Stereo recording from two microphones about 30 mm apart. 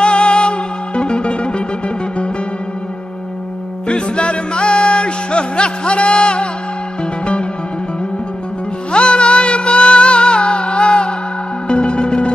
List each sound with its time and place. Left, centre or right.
0.0 s music: left
3.8 s music: left
8.9 s music: left